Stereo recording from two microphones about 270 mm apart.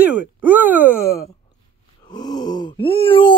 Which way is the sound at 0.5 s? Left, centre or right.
Centre.